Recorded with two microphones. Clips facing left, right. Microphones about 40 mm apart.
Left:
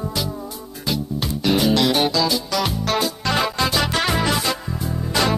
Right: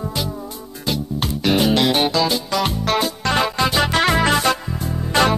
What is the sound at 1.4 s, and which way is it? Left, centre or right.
Music, right.